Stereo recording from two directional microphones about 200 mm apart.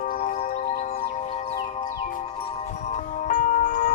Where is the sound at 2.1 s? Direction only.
40° left (ahead or behind).